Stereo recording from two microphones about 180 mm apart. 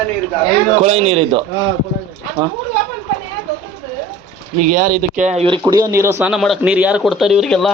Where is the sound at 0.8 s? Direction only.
35° right (ahead or behind).